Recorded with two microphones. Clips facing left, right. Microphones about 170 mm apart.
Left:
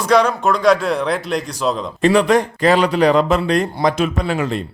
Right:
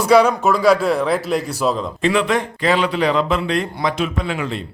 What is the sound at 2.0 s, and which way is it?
A man's voice, 40° left (ahead or behind).